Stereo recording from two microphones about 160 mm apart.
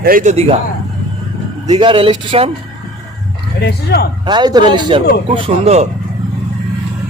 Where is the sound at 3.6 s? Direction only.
90° left.